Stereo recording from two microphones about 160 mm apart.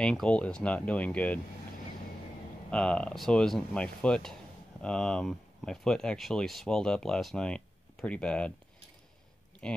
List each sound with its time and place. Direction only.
0.0 s speech: 5° left (ahead or behind)
2.7 s speech: 5° left (ahead or behind)
9.6 s speech: 5° left (ahead or behind)